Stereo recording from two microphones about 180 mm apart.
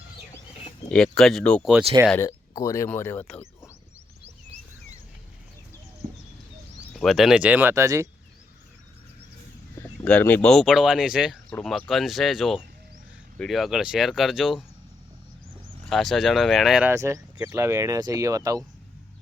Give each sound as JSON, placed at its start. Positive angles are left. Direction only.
{"t": 0.9, "sound": "speech", "side_deg": 5}
{"t": 2.0, "sound": "speech", "side_deg": 15}
{"t": 6.9, "sound": "speech", "side_deg": 0}
{"t": 9.7, "sound": "speech", "side_deg": 10}
{"t": 15.9, "sound": "speech", "side_deg": 0}
{"t": 16.9, "sound": "speech", "side_deg": -15}